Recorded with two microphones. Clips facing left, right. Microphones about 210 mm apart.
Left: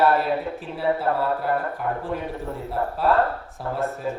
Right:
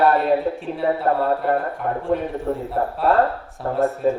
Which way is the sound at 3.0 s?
Centre (ahead or behind).